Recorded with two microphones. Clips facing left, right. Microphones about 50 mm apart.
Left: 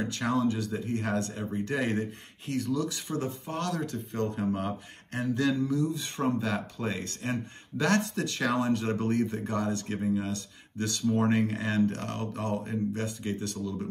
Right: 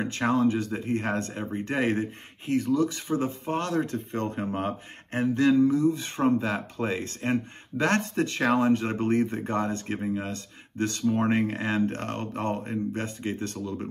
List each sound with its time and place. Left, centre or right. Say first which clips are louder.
0.0 s speech: right 4 dB; right
9.9 s speech: left 3 dB; right
10.2 s speech: even; right